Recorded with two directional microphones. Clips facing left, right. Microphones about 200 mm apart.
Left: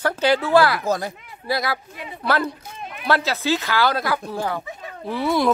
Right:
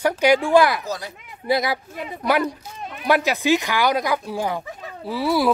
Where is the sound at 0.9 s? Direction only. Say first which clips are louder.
Left 6 dB; 50° left (ahead or behind).